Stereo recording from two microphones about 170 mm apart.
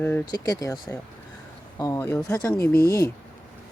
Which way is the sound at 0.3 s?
20° left (ahead or behind).